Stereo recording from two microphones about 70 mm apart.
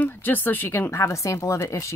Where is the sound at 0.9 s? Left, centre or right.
Left.